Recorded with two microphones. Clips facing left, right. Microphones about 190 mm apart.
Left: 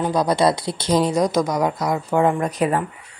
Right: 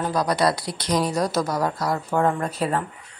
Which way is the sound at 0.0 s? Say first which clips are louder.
Left 4 dB; 20° left (ahead or behind).